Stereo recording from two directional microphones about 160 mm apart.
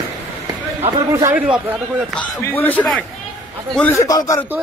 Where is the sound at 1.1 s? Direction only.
20° right (ahead or behind).